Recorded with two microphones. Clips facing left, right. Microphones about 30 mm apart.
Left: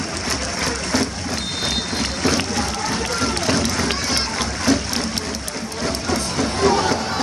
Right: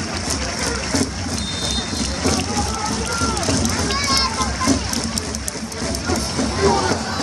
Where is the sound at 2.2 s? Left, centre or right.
Centre.